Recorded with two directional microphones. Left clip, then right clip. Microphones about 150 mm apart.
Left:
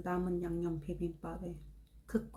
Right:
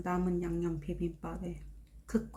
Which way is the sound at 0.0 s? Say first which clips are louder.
Right 2 dB; 20° right (ahead or behind).